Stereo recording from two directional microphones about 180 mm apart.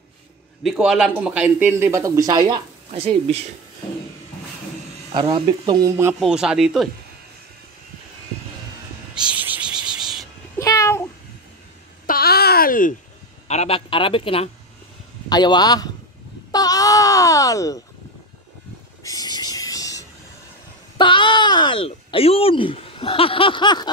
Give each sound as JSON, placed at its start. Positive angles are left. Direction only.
{"t": 0.7, "sound": "speech", "side_deg": 0}
{"t": 2.9, "sound": "speech", "side_deg": -30}
{"t": 5.1, "sound": "speech", "side_deg": -30}
{"t": 6.1, "sound": "speech", "side_deg": -5}
{"t": 9.4, "sound": "cricket", "side_deg": -10}
{"t": 10.6, "sound": "cat", "side_deg": 15}
{"t": 12.1, "sound": "babbling", "side_deg": 60}
{"t": 13.5, "sound": "a man's voice", "side_deg": 35}
{"t": 16.5, "sound": "a sound", "side_deg": 20}
{"t": 19.0, "sound": "a sound", "side_deg": 20}
{"t": 21.0, "sound": "speech", "side_deg": 25}